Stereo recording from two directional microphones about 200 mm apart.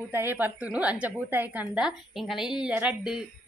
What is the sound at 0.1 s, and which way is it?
A woman's voice, 10° right (ahead or behind).